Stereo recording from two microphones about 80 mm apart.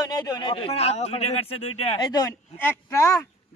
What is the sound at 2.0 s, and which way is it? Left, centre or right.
Speech, left.